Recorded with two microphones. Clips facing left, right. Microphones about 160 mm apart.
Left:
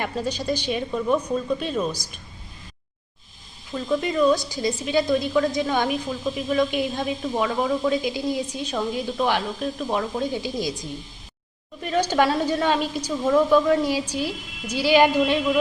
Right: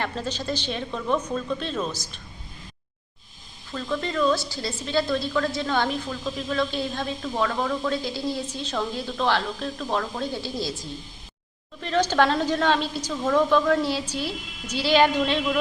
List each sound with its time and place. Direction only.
0.0 s a woman's voice: 10° left (ahead or behind)
3.7 s a woman's voice: 15° left (ahead or behind)